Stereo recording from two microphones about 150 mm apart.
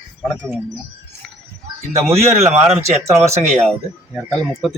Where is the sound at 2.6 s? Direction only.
45° right (ahead or behind).